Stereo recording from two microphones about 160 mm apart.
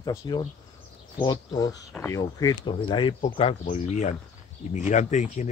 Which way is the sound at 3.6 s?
50° left (ahead or behind).